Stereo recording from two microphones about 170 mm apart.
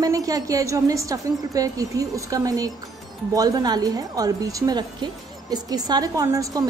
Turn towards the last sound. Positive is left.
turn(degrees=-20)  # may be behind; listen again after turning